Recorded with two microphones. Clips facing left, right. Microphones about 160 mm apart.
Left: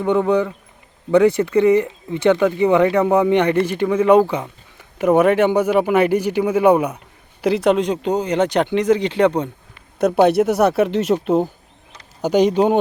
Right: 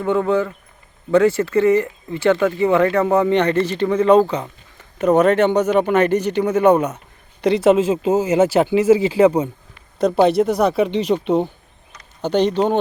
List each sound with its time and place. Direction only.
0.0 s speech: 15° left (ahead or behind)
7.4 s speech: centre (ahead or behind)